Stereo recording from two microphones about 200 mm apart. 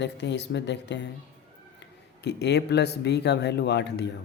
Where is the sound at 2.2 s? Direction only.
55° left (ahead or behind).